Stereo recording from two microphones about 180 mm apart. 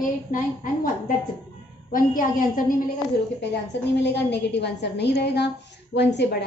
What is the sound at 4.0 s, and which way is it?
A woman's voice, 70° left (ahead or behind).